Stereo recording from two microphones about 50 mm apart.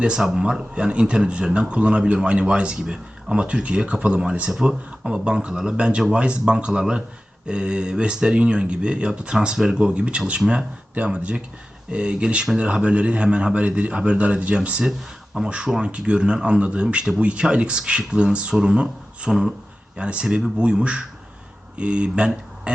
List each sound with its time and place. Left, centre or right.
0.0 s speech: centre